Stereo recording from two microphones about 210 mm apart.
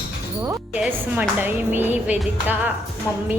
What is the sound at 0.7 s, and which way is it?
Music, 5° right (ahead or behind).